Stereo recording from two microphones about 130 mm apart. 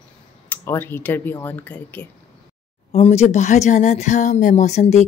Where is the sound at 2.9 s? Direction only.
50° left (ahead or behind).